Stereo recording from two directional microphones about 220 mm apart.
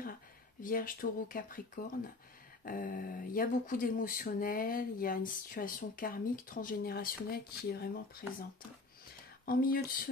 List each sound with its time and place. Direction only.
0.6 s speech: 40° left (ahead or behind)
2.6 s speech: 40° left (ahead or behind)
9.5 s speech: 40° left (ahead or behind)